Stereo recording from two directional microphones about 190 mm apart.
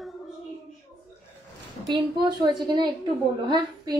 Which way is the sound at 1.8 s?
25° right (ahead or behind).